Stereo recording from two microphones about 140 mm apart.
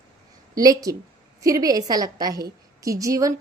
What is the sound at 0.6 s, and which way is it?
Speech, 25° right (ahead or behind).